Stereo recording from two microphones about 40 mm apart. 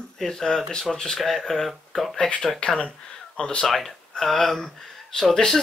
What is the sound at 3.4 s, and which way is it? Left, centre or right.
Speech, left.